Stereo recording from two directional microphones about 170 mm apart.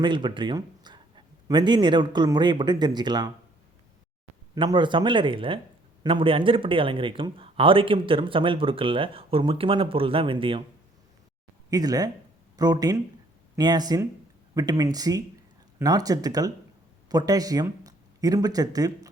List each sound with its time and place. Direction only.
0.0 s a man's voice: 25° right (ahead or behind)
4.5 s speech: 30° right (ahead or behind)
11.7 s speech: 20° right (ahead or behind)